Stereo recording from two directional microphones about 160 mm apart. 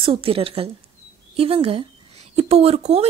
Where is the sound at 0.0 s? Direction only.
35° right (ahead or behind).